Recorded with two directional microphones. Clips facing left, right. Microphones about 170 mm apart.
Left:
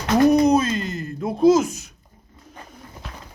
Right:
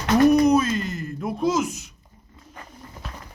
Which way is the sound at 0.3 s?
20° left (ahead or behind).